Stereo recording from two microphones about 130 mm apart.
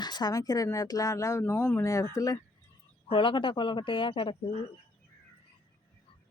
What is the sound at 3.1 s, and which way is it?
Speech, 40° left (ahead or behind).